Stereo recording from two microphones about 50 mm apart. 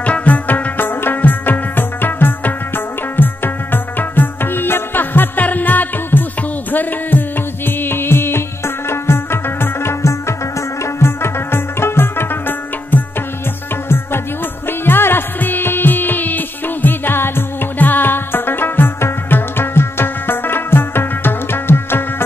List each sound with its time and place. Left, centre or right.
0.0 s music: left